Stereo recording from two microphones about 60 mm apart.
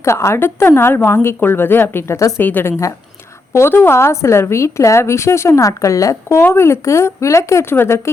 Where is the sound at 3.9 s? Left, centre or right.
Left.